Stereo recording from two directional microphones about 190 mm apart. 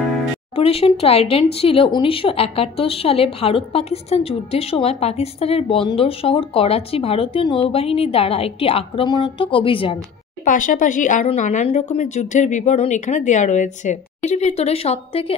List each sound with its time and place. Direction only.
0.6 s a woman's voice: 30° left (ahead or behind)
10.4 s speech: 45° left (ahead or behind)